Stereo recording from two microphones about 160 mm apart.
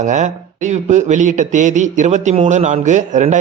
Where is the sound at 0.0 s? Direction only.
50° right (ahead or behind).